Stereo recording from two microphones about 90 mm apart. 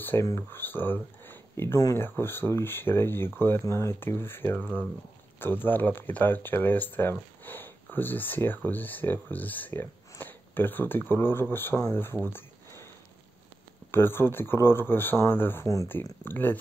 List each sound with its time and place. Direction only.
0.1 s speech: 30° left (ahead or behind)
0.5 s a sound: 25° left (ahead or behind)
2.0 s speech: 25° left (ahead or behind)
12.3 s a sound: 25° left (ahead or behind)
13.9 s speech: 25° left (ahead or behind)
15.6 s speech: 35° left (ahead or behind)
15.9 s speech: 25° left (ahead or behind)